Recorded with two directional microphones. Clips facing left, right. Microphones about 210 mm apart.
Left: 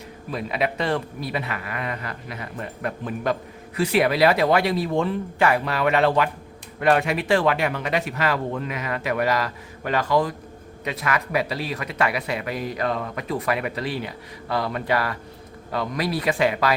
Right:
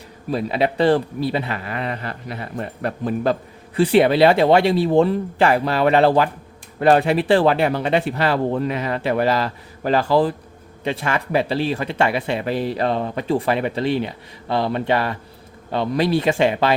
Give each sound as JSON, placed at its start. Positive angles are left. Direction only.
{"t": 0.3, "sound": "speech", "side_deg": -30}